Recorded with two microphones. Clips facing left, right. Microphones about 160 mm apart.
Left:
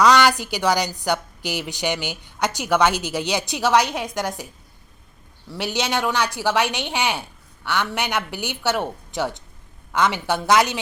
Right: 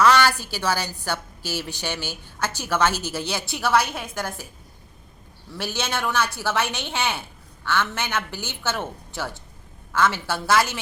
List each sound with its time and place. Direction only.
0.0 s a woman's voice: 15° left (ahead or behind)
5.5 s a woman's voice: 15° left (ahead or behind)